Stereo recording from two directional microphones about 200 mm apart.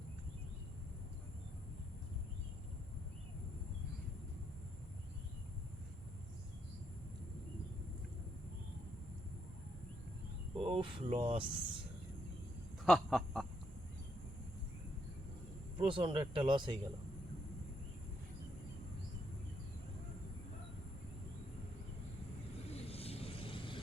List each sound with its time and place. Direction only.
10.5 s speech: 25° right (ahead or behind)
12.8 s quack: centre (ahead or behind)
15.8 s speech: 25° right (ahead or behind)
22.7 s vehicle: 30° left (ahead or behind)